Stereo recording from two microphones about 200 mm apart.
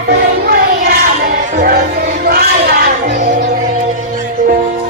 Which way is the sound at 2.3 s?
50° right (ahead or behind).